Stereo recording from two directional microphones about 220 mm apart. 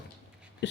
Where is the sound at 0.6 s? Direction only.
55° left (ahead or behind).